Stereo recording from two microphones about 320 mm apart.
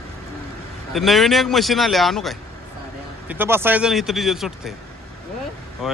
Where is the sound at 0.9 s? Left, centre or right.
Centre.